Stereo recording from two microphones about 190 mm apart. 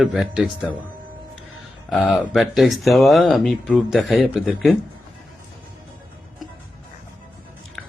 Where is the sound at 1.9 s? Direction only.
Centre (ahead or behind).